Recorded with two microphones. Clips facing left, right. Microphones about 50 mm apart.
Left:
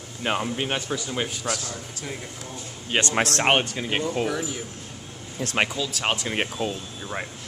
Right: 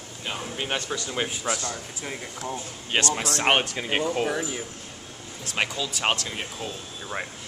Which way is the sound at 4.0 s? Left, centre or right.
Centre.